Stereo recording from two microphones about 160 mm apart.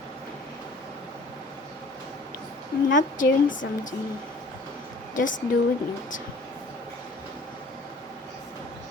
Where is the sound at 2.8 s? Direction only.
55° left (ahead or behind).